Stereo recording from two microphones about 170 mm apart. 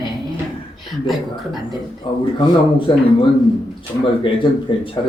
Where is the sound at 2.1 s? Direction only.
30° left (ahead or behind).